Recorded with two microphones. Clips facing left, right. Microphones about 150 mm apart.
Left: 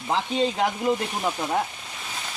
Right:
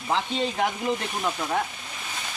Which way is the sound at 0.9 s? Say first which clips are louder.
Left 3 dB; 10° left (ahead or behind).